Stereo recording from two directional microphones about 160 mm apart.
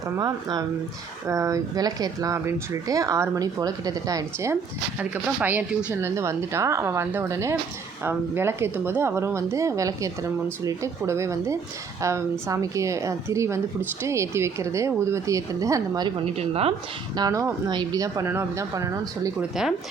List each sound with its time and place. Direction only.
0.2 s speech: 25° right (ahead or behind)
4.9 s speech: 10° right (ahead or behind)
16.2 s speech: 40° right (ahead or behind)
17.2 s speech: 25° right (ahead or behind)
19.4 s speech: 5° right (ahead or behind)